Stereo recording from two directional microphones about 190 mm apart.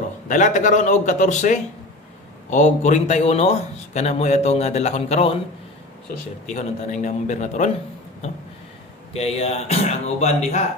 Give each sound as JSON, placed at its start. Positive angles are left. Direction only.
{"t": 0.3, "sound": "a man's voice", "side_deg": 40}
{"t": 6.4, "sound": "a man's voice", "side_deg": 40}
{"t": 9.1, "sound": "a man's voice", "side_deg": 35}